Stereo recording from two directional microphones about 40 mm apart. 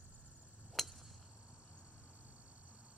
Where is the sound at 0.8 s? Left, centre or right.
Centre.